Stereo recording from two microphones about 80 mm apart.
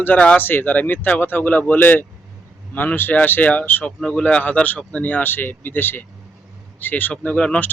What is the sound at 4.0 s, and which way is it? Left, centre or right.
Speech, centre.